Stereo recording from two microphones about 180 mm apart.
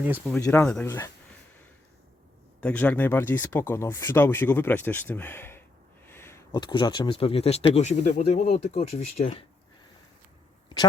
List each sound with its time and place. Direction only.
0.4 s speech: 10° left (ahead or behind)
2.6 s speech: 5° left (ahead or behind); by 9.3 s 40° left (ahead or behind)